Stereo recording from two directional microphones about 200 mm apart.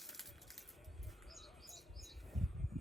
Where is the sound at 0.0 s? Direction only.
Centre (ahead or behind).